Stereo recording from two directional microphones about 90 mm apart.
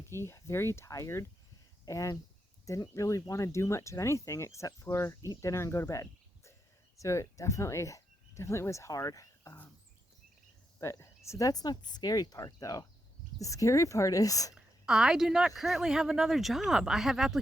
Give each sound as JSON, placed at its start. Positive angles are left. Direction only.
{"t": 0.1, "sound": "speech", "side_deg": 30}
{"t": 10.8, "sound": "speech", "side_deg": 35}
{"t": 14.5, "sound": "speech", "side_deg": -5}